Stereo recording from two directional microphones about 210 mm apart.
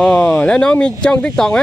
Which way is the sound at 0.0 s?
5° left (ahead or behind).